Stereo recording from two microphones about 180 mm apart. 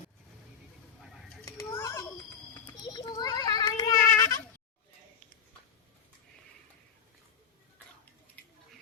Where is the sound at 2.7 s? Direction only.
25° left (ahead or behind).